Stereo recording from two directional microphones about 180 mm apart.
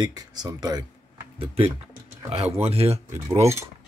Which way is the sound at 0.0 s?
20° right (ahead or behind).